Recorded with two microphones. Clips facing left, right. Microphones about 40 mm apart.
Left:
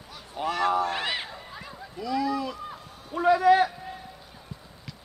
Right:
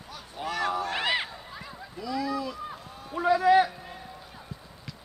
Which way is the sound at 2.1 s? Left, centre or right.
Left.